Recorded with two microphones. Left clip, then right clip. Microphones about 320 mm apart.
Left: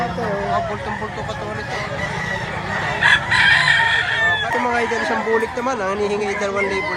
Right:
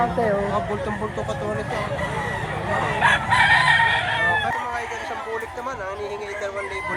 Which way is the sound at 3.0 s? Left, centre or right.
Centre.